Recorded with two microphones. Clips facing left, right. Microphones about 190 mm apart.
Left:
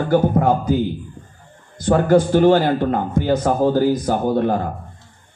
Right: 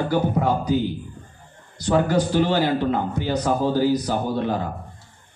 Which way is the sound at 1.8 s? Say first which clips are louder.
Left 5 dB; 50° left (ahead or behind).